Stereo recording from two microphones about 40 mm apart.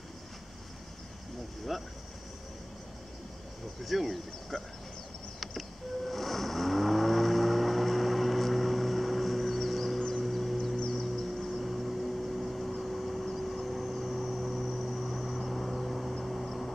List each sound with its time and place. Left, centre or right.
1.7 s speech: centre
3.8 s speech: centre
5.4 s vehicle: centre
10.9 s music: centre
11.5 s vehicle: centre